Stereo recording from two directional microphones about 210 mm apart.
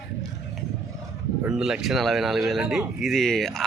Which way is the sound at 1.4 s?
5° right (ahead or behind).